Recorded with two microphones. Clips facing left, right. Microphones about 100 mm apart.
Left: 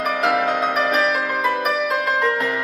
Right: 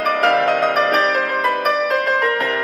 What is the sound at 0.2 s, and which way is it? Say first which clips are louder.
Harp: right 3 dB; 5° left (ahead or behind).